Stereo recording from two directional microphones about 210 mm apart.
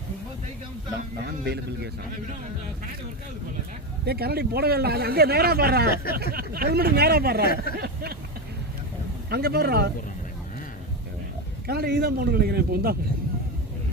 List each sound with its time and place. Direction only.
1.2 s speech: 50° right (ahead or behind)
4.0 s speech: 50° right (ahead or behind)
7.5 s speech: 45° left (ahead or behind)
9.3 s speech: 50° right (ahead or behind)
11.6 s speech: 45° right (ahead or behind)